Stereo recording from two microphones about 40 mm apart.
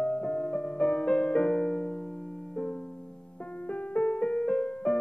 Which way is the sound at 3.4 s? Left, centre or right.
Left.